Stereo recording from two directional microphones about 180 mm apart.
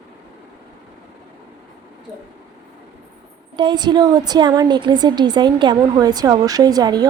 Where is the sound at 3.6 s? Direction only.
25° right (ahead or behind).